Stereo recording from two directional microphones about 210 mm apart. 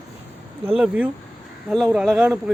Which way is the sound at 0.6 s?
5° right (ahead or behind).